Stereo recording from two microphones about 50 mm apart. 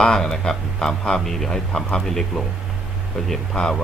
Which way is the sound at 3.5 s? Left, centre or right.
Centre.